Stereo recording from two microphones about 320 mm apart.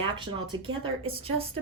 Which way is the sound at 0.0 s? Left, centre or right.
Centre.